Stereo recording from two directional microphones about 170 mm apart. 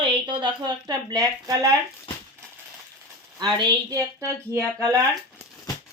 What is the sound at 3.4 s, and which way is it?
Speech, 20° right (ahead or behind).